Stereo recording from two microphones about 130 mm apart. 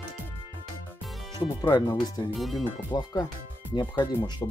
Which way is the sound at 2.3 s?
Centre (ahead or behind).